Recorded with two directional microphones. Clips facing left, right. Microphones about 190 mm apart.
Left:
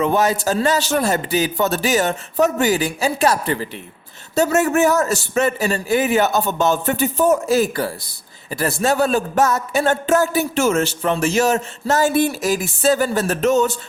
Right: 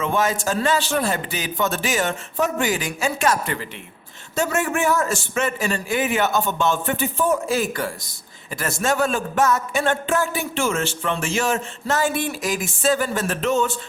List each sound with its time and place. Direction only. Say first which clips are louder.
0.0 s a man's voice: left 4 dB; 40° left (ahead or behind)